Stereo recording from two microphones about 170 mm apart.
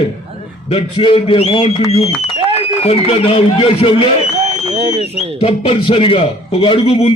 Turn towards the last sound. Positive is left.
turn(degrees=35)  # may be behind; listen again after turning